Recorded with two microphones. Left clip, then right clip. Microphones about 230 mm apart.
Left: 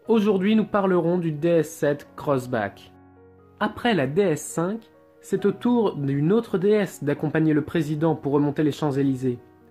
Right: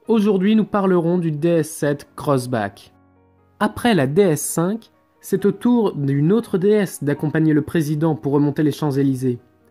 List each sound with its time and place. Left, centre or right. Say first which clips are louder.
0.0 s speech: right 3 dB; right
3.5 s speech: right 5 dB; right